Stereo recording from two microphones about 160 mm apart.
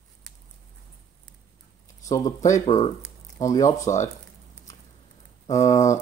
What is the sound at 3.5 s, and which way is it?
Speech, 20° left (ahead or behind).